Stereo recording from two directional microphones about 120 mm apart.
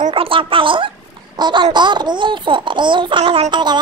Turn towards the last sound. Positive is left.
turn(degrees=-40)  # may be behind; listen again after turning